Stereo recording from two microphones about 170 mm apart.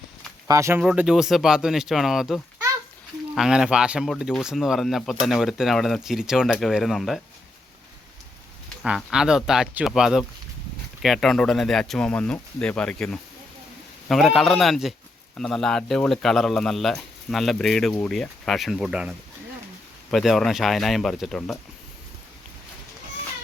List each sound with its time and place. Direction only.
0.4 s speech: 20° right (ahead or behind)
0.8 s speech: 5° right (ahead or behind)
8.8 s speech: centre (ahead or behind)